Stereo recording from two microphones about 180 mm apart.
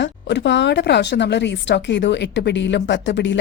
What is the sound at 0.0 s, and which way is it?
Speech, 80° left.